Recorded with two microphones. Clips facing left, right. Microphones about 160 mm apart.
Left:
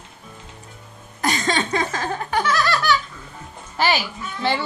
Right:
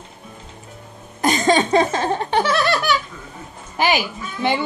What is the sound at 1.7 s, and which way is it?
Laughter, 30° right (ahead or behind).